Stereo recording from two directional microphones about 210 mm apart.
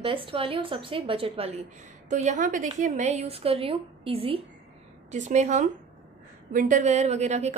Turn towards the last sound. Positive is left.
turn(degrees=-35)  # may be behind; listen again after turning